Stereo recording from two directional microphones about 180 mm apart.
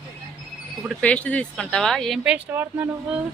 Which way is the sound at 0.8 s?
5° left (ahead or behind).